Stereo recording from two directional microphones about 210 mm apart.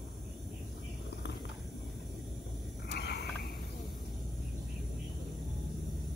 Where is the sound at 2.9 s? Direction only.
50° left (ahead or behind).